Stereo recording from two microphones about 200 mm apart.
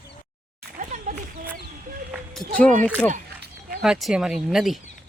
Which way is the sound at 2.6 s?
10° left (ahead or behind).